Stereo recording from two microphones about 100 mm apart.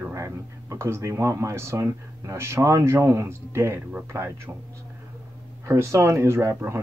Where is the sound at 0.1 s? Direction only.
30° right (ahead or behind).